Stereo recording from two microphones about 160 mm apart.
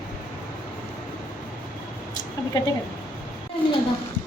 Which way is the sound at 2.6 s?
25° left (ahead or behind).